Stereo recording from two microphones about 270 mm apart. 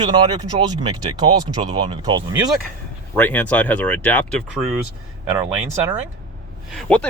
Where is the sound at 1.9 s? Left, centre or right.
Centre.